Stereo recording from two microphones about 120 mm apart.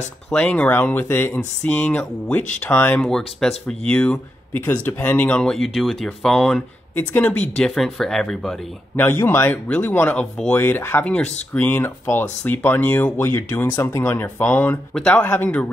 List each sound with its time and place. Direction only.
0.3 s speech: 10° left (ahead or behind)
3.0 s speech: 5° left (ahead or behind)
8.9 s speech: 20° left (ahead or behind)
10.6 s speech: 20° left (ahead or behind)
15.0 s speech: 5° left (ahead or behind)
15.2 s speech: 15° left (ahead or behind)